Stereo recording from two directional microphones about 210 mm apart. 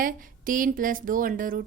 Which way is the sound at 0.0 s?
40° right (ahead or behind).